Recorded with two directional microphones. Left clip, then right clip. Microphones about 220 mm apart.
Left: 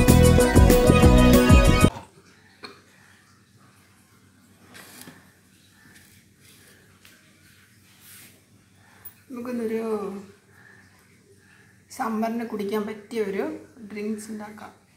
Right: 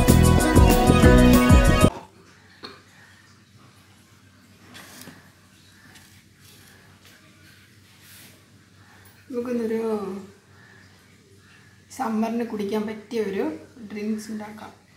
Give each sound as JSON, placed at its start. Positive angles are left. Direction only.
{"t": 0.0, "sound": "music", "side_deg": 0}
{"t": 9.3, "sound": "dog", "side_deg": 25}
{"t": 11.9, "sound": "a woman's voice", "side_deg": 20}